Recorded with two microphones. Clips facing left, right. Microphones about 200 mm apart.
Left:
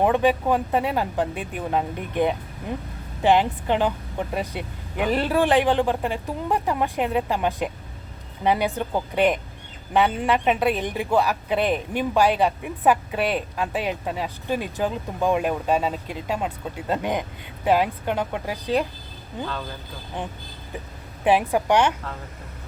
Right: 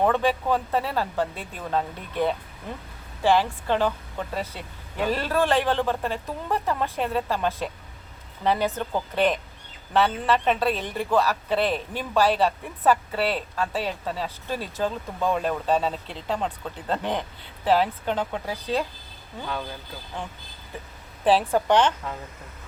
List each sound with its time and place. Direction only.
0.0 s a man's voice: 15° left (ahead or behind)
21.2 s a man's voice: 15° left (ahead or behind)